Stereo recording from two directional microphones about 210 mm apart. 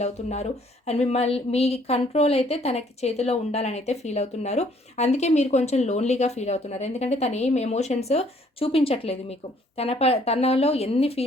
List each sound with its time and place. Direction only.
0.0 s a woman's voice: 30° left (ahead or behind)